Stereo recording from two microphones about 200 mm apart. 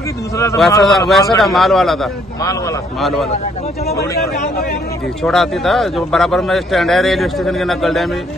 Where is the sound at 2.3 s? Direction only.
15° left (ahead or behind).